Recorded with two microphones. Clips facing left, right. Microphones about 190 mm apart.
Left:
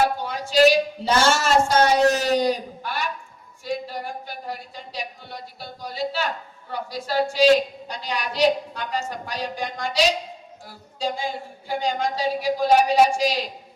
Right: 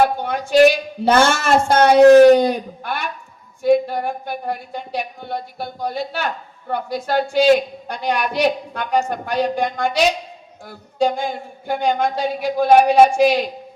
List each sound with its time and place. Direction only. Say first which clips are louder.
0.0 s a woman's voice: right 5 dB; 60° right (ahead or behind)